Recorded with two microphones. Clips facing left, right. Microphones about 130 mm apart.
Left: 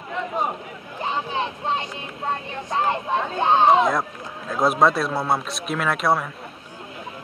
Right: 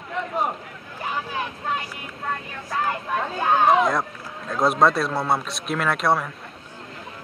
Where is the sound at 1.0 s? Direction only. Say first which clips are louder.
Left 3 dB; 25° left (ahead or behind).